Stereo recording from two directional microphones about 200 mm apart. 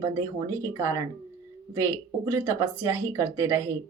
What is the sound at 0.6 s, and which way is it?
Speech, 15° right (ahead or behind).